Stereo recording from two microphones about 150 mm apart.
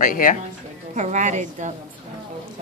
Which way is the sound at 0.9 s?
55° right (ahead or behind).